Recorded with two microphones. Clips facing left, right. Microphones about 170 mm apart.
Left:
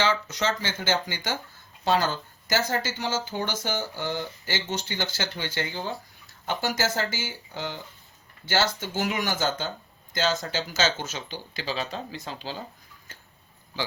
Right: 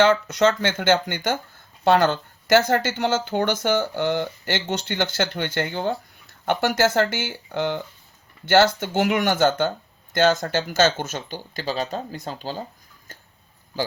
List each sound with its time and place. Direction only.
0.0 s speech: 55° right (ahead or behind)